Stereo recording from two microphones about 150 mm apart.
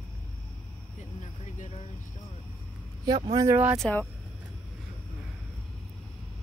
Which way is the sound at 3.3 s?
15° right (ahead or behind).